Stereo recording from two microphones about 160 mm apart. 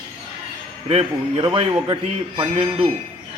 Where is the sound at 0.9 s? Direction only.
40° right (ahead or behind).